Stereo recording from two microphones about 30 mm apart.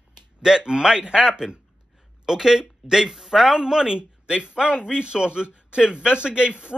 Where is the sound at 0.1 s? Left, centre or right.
Right.